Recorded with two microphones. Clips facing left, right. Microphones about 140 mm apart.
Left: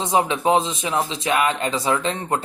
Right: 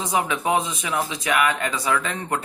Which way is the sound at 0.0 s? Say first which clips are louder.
Left 4 dB; 30° left (ahead or behind).